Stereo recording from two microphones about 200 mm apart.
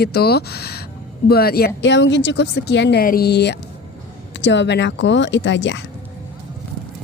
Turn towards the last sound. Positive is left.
turn(degrees=65)  # may be behind; listen again after turning